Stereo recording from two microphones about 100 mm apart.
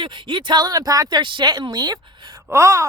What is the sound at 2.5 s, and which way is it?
Gasp, 30° right (ahead or behind).